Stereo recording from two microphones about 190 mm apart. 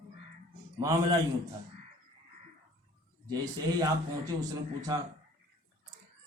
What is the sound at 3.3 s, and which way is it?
Speech, 20° right (ahead or behind).